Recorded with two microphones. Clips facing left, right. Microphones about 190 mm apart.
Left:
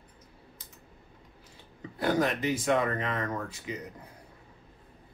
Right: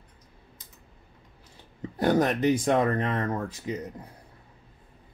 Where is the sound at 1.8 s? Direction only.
40° right (ahead or behind).